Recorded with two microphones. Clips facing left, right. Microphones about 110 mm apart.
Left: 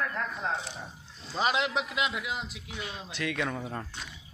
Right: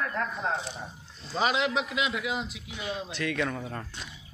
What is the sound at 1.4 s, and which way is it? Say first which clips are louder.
A man's voice: right 1 dB; 5° left (ahead or behind).